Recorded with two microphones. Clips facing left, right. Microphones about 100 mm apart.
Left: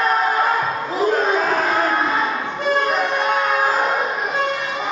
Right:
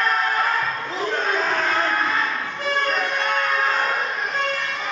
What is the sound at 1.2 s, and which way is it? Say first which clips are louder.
Battle cry: left 4 dB; 10° left (ahead or behind).